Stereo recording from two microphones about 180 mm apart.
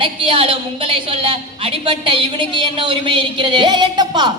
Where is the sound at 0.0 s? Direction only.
30° right (ahead or behind).